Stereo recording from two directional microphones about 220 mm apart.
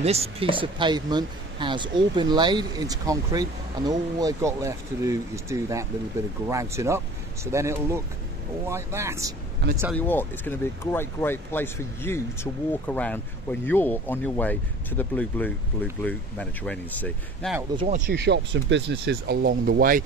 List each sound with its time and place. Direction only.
0.0 s speech: 30° right (ahead or behind); by 9.3 s 10° right (ahead or behind)
9.9 s speech: 10° left (ahead or behind)
17.7 s speech: 30° right (ahead or behind)